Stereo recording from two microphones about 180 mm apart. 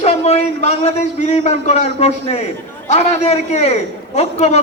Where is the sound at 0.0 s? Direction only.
35° left (ahead or behind).